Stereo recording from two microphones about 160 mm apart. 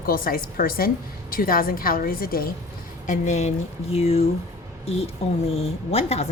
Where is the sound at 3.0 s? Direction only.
50° left (ahead or behind).